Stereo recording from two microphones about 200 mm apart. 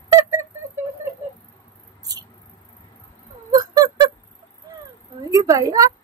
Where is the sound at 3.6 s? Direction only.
20° right (ahead or behind).